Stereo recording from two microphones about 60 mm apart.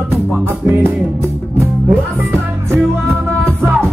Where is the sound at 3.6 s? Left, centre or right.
Right.